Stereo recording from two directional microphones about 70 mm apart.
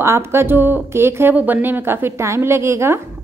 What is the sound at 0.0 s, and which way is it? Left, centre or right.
A woman's voice, right.